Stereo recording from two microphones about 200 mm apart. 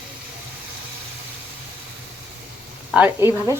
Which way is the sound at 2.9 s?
10° right (ahead or behind).